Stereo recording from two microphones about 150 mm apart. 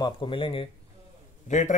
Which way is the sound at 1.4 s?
55° left (ahead or behind).